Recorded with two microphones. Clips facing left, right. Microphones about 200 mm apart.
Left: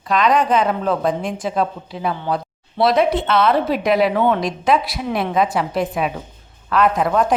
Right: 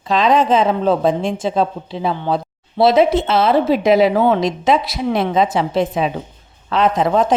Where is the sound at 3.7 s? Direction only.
Centre (ahead or behind).